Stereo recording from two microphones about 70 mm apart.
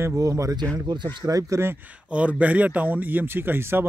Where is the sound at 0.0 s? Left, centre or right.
Right.